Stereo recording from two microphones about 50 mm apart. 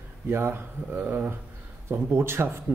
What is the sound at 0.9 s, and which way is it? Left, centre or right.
Speech, right.